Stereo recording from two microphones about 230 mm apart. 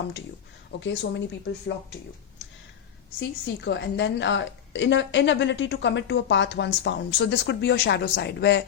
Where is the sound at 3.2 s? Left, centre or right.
Left.